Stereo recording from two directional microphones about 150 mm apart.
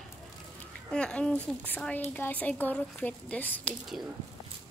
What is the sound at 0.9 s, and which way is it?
A woman's voice, 5° left (ahead or behind).